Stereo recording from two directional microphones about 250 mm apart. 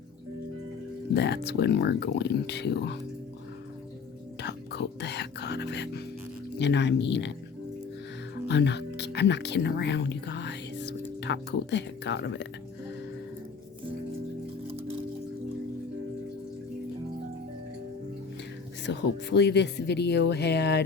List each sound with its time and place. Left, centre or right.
1.1 s speech: left
4.4 s music: left
6.6 s speech: left
8.4 s music: left
11.2 s speech: left
18.9 s speech: left